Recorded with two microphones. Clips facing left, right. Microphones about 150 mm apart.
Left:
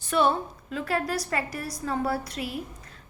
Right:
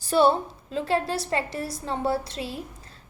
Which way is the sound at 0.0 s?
30° right (ahead or behind).